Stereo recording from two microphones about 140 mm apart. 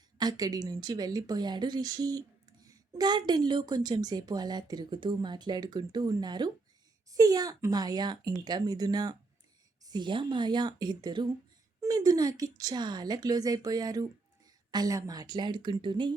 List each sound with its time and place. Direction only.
0.2 s a woman's voice: 30° right (ahead or behind)